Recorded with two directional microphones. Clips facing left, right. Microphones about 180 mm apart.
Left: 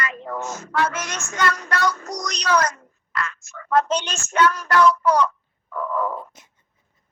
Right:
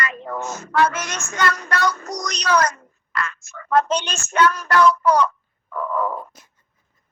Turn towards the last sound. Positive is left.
turn(degrees=-60)  # may be behind; listen again after turning